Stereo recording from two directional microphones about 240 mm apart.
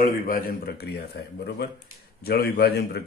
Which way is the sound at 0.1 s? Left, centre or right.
Left.